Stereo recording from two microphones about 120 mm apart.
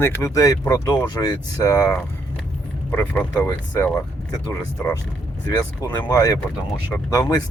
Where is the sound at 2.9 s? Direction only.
15° left (ahead or behind).